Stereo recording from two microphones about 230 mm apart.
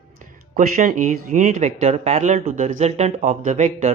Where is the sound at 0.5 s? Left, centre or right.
Right.